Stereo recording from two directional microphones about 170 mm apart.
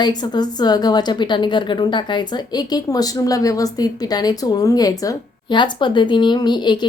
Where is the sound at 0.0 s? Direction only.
25° left (ahead or behind).